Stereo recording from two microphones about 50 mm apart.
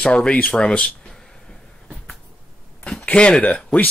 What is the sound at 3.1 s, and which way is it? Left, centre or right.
Speech, left.